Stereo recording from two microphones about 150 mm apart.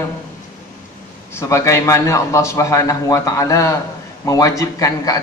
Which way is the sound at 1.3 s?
20° left (ahead or behind).